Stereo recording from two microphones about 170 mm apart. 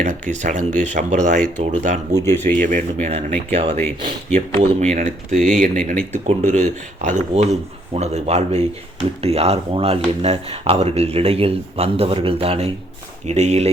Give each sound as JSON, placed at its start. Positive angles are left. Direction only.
{"t": 0.0, "sound": "speech", "side_deg": -45}
{"t": 2.2, "sound": "speech", "side_deg": 10}
{"t": 2.6, "sound": "speech", "side_deg": -50}
{"t": 3.1, "sound": "speech", "side_deg": -35}